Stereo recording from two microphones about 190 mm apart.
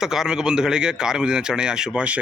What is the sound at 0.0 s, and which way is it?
Speech, 5° right (ahead or behind).